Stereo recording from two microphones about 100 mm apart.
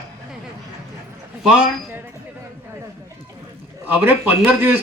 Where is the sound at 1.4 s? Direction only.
5° right (ahead or behind).